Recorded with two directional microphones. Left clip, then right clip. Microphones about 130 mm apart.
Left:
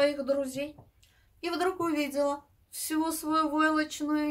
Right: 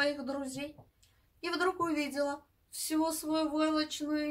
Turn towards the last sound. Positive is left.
turn(degrees=20)  # may be behind; listen again after turning